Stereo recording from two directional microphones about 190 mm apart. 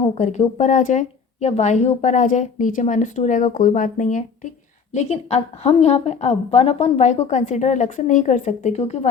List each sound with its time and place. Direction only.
0.1 s a woman's voice: 35° left (ahead or behind)